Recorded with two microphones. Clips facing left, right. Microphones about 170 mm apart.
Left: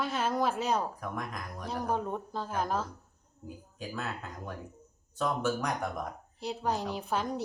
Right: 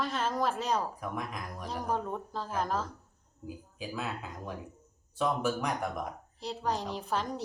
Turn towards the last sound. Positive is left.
turn(degrees=5)  # may be behind; listen again after turning